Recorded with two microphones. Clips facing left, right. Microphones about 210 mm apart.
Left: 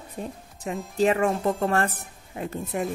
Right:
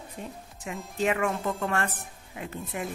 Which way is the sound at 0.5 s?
35° left (ahead or behind).